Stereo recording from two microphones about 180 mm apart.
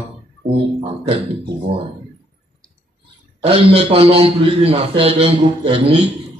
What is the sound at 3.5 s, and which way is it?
A man's voice, 30° right (ahead or behind).